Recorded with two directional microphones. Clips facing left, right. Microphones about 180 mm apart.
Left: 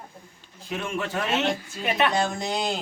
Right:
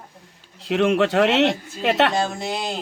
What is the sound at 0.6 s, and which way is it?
Speech, 75° right (ahead or behind).